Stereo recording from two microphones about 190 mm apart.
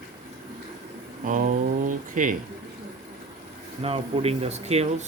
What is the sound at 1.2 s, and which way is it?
Speech, 45° right (ahead or behind).